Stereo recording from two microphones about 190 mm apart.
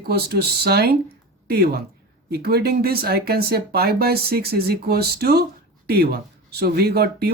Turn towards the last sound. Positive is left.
turn(degrees=-55)  # may be behind; listen again after turning